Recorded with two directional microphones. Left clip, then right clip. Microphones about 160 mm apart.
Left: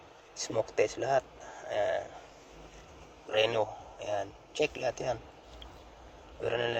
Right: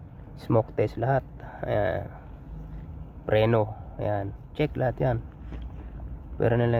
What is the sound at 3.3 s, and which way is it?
Speech, 35° right (ahead or behind).